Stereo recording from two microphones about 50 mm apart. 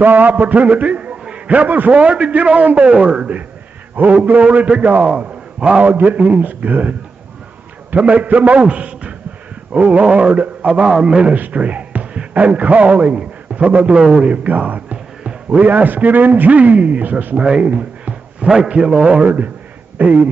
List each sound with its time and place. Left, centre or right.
0.0 s a man's voice: right
3.9 s a man's voice: right
5.9 s a man's voice: right
13.9 s a man's voice: centre
14.3 s a sound: right
15.7 s a man's voice: right
17.5 s a sound: right
18.5 s a man's voice: centre
19.2 s a man's voice: right